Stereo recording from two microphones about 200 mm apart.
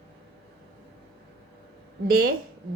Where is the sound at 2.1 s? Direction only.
45° right (ahead or behind).